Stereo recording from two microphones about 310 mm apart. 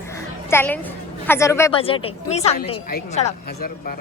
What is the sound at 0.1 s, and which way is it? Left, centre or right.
A woman's voice, centre.